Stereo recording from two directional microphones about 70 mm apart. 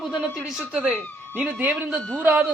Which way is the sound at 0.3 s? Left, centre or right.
Centre.